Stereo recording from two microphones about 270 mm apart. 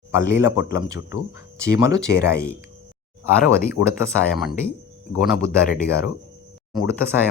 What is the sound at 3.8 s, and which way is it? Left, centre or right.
Speech, left.